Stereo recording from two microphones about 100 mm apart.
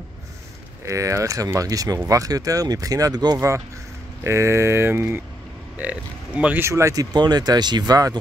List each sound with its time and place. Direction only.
0.8 s speech: 30° right (ahead or behind)
3.3 s speech: 25° right (ahead or behind)
5.8 s speech: 15° right (ahead or behind)
6.6 s speech: 30° right (ahead or behind)